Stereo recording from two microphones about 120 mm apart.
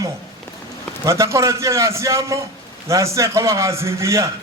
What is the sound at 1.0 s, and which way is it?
A man's voice, 25° right (ahead or behind).